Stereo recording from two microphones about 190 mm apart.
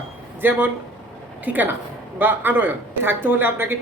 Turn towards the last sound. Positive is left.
turn(degrees=-10)  # may be behind; listen again after turning